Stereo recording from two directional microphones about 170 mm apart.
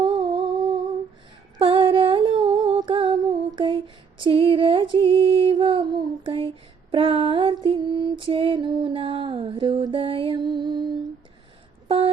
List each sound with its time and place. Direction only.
0.0 s humming: 30° right (ahead or behind)
1.5 s humming: 30° right (ahead or behind)
6.9 s female singing: 35° right (ahead or behind)
11.9 s a sound: 30° right (ahead or behind)